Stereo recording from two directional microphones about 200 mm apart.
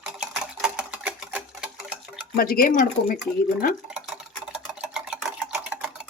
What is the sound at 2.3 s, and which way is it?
Speech, 45° left (ahead or behind).